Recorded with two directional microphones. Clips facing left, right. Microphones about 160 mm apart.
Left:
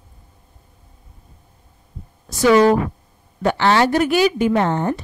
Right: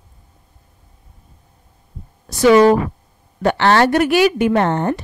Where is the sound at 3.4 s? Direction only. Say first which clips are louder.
Right 2 dB; 60° right (ahead or behind).